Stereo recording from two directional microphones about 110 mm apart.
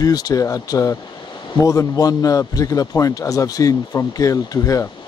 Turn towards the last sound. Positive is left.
turn(degrees=30)  # may be behind; listen again after turning